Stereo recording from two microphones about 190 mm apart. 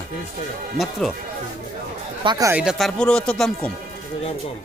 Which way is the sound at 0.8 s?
Centre (ahead or behind).